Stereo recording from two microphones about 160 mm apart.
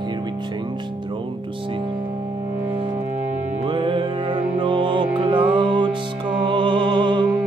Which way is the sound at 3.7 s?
30° right (ahead or behind).